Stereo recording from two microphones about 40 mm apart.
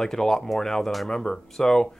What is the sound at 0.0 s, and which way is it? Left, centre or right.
Speech, centre.